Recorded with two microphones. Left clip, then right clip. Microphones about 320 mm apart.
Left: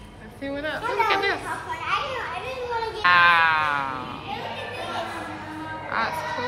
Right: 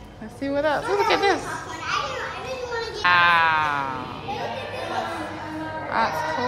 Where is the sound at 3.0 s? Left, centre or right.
Centre.